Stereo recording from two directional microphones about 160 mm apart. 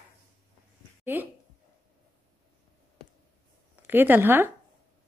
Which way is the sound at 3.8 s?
10° right (ahead or behind).